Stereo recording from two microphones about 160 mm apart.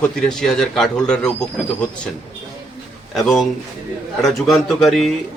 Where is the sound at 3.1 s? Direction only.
Centre (ahead or behind).